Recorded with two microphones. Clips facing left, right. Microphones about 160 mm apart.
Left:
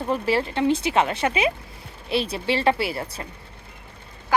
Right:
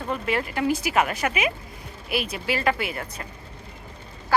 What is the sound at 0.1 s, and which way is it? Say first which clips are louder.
A woman's voice: left 4 dB; 30° left (ahead or behind).